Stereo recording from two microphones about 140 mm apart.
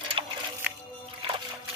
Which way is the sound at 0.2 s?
40° right (ahead or behind).